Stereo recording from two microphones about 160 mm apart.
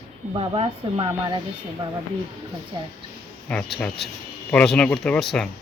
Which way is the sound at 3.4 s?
5° left (ahead or behind).